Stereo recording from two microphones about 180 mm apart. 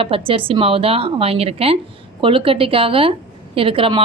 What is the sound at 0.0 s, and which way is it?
A woman's voice, 30° right (ahead or behind).